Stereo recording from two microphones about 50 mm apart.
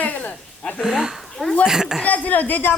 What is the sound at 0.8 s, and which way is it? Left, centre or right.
Speech, centre.